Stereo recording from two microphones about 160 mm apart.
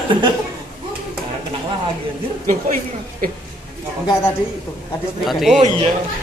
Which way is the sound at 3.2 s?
60° right (ahead or behind).